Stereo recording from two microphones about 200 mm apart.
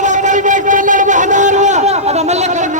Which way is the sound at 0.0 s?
40° right (ahead or behind).